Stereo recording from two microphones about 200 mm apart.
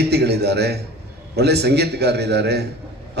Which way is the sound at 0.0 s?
55° right (ahead or behind).